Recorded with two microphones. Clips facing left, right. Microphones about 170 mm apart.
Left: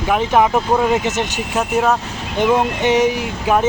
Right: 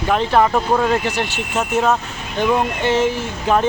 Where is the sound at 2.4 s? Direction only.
20° left (ahead or behind).